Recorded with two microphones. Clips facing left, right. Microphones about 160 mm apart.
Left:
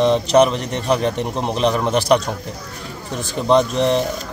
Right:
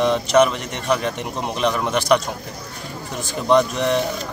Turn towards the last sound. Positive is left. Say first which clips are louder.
# left 2 dB
turn(degrees=30)  # may be behind; listen again after turning